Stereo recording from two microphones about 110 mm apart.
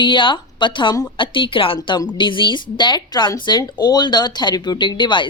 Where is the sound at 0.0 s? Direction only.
45° left (ahead or behind).